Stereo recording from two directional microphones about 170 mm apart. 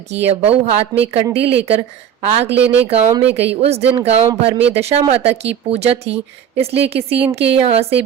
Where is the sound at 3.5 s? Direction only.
35° right (ahead or behind).